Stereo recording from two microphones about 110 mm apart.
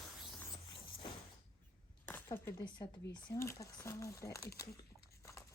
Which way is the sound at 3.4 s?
25° left (ahead or behind).